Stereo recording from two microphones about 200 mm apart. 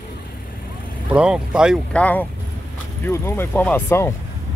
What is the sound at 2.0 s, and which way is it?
Speech, 10° left (ahead or behind).